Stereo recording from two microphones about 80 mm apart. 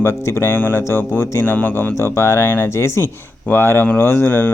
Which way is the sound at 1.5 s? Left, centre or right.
Left.